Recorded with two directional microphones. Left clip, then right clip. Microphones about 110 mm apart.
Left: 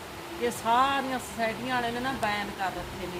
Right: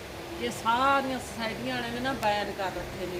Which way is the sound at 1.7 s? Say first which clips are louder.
Left 2 dB; 35° left (ahead or behind).